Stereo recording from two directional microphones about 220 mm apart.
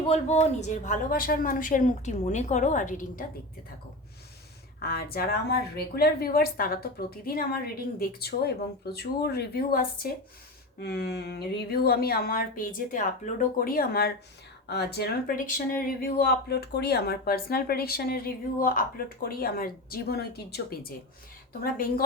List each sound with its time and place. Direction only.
0.1 s speech: 30° left (ahead or behind)
4.8 s speech: 45° left (ahead or behind)